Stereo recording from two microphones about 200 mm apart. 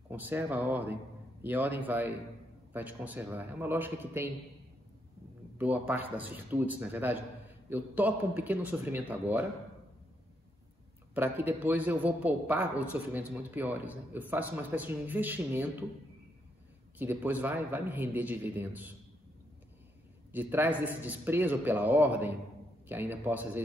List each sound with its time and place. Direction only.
0.1 s a man's voice: 10° right (ahead or behind)
5.6 s a man's voice: 10° right (ahead or behind)
11.1 s a man's voice: 10° right (ahead or behind)
17.0 s a man's voice: 10° right (ahead or behind)
20.3 s a man's voice: 10° right (ahead or behind)